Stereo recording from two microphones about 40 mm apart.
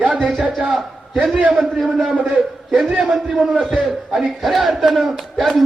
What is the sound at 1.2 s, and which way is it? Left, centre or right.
Speech, right.